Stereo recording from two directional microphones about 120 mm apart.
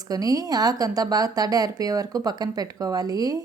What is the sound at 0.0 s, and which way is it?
A woman's voice, 30° right (ahead or behind).